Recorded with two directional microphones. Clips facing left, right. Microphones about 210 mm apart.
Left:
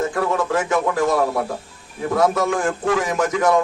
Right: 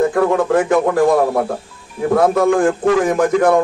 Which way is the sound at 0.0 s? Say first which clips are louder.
Right 7 dB; 55° right (ahead or behind).